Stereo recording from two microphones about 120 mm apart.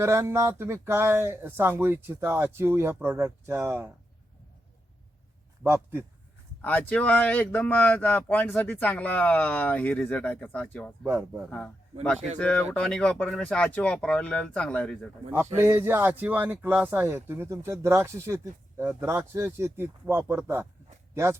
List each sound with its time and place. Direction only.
0.0 s speech: 20° right (ahead or behind)
5.6 s speech: 20° right (ahead or behind)
6.6 s speech: 15° left (ahead or behind)
11.0 s speech: 20° right (ahead or behind)
12.4 s speech: 10° left (ahead or behind)
15.5 s speech: 20° right (ahead or behind)